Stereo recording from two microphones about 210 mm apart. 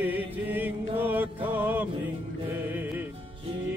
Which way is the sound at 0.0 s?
10° right (ahead or behind).